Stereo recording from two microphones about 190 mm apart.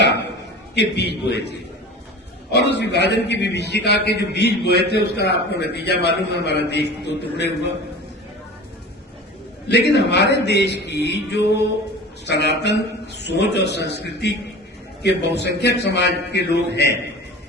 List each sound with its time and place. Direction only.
0.0 s a sound: 65° left (ahead or behind)
0.8 s a man's voice: 60° left (ahead or behind)
9.6 s a man's voice: 65° left (ahead or behind)
15.4 s a man's voice: 60° left (ahead or behind)